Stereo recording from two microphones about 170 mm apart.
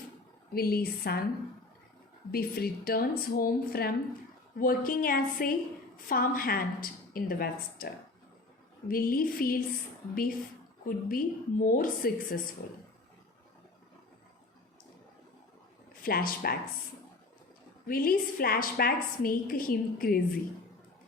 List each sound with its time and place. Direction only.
0.5 s a woman's voice: 65° left (ahead or behind)
2.3 s a woman's voice: 60° left (ahead or behind)
8.9 s a woman's voice: 60° left (ahead or behind)
10.8 s a woman's voice: 55° left (ahead or behind)
16.0 s a woman's voice: 60° left (ahead or behind)
17.8 s a woman's voice: 60° left (ahead or behind)